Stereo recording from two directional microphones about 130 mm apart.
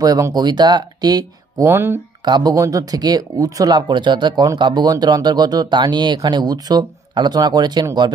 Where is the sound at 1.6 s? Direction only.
20° right (ahead or behind).